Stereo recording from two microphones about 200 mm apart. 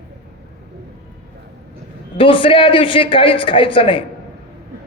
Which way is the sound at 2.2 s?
25° left (ahead or behind).